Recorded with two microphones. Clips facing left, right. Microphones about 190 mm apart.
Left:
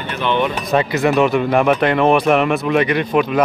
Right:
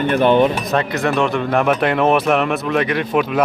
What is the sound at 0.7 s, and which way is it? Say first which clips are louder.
Speech: left 3 dB; 5° left (ahead or behind).